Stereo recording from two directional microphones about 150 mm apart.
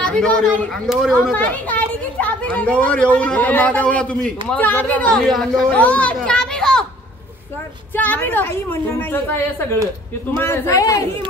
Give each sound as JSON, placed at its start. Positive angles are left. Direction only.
{"t": 0.0, "sound": "a child's voice", "side_deg": 5}
{"t": 7.9, "sound": "a child's voice", "side_deg": 10}
{"t": 10.4, "sound": "a man's voice", "side_deg": 15}